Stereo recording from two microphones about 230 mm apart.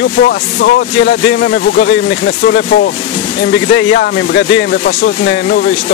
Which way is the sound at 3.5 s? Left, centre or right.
Left.